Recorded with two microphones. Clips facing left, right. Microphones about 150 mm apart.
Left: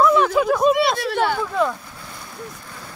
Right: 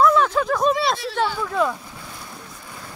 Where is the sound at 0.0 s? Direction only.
10° left (ahead or behind).